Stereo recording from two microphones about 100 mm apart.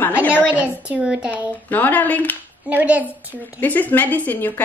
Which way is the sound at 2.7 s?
15° right (ahead or behind).